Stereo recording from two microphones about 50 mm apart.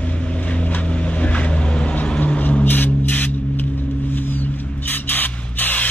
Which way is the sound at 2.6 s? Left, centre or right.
Left.